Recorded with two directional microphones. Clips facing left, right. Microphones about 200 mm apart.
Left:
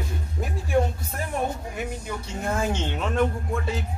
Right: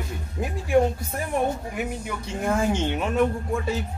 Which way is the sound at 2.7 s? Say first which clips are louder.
Right 3 dB; 10° right (ahead or behind).